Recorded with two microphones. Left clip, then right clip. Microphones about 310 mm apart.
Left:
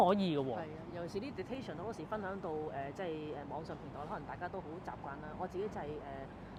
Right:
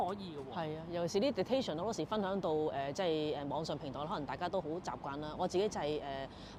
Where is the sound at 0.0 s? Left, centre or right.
Left.